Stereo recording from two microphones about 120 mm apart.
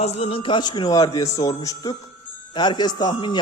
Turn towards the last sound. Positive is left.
turn(degrees=35)  # may be behind; listen again after turning